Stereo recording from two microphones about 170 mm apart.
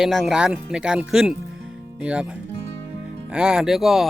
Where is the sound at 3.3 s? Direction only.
5° right (ahead or behind).